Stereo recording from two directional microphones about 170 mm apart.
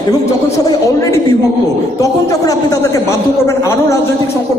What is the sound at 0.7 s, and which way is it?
A man's voice, 20° left (ahead or behind).